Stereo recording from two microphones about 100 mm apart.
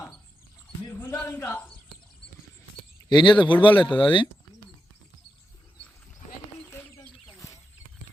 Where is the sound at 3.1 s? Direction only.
50° left (ahead or behind).